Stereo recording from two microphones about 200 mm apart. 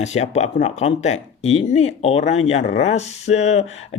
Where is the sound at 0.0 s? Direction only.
35° left (ahead or behind).